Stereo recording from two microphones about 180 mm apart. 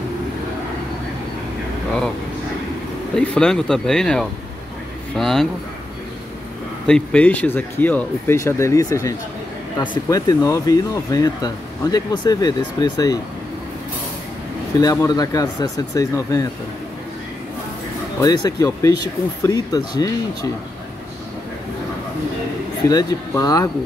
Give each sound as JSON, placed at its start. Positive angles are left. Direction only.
{"t": 3.2, "sound": "speech", "side_deg": 5}
{"t": 6.9, "sound": "speech", "side_deg": 5}
{"t": 14.8, "sound": "speech", "side_deg": 20}
{"t": 18.2, "sound": "speech", "side_deg": 20}
{"t": 22.8, "sound": "speech", "side_deg": 20}